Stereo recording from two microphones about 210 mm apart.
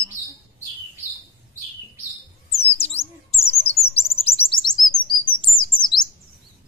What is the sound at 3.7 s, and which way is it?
Chirp, 30° left (ahead or behind).